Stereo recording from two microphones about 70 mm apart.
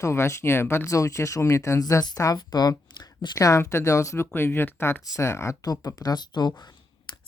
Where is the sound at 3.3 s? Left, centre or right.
Left.